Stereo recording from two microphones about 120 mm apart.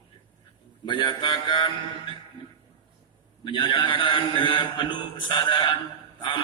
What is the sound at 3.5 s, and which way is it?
A man's voice, 40° left (ahead or behind).